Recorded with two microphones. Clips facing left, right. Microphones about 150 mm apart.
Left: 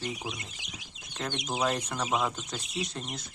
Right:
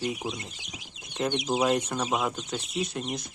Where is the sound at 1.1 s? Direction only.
15° right (ahead or behind).